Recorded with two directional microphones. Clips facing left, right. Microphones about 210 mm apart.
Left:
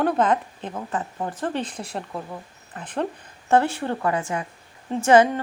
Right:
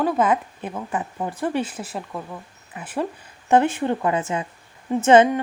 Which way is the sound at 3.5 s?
20° right (ahead or behind).